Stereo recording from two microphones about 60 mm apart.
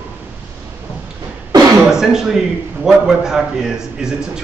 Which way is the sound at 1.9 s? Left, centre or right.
Centre.